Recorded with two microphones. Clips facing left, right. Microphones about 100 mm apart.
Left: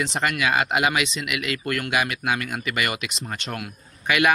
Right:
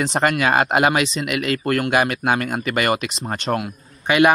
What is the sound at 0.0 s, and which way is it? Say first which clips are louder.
Speech: right 5 dB; 40° right (ahead or behind).